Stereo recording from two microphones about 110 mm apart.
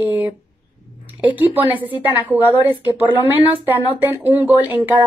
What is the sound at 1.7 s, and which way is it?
Speech, 15° right (ahead or behind).